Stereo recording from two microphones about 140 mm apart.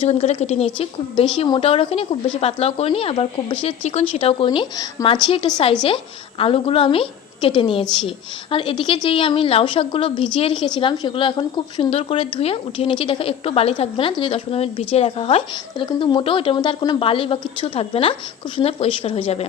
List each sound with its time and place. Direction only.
0.0 s a woman's voice: 50° left (ahead or behind)